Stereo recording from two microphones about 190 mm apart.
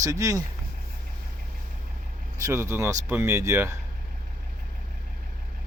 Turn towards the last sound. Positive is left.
turn(degrees=-15)  # may be behind; listen again after turning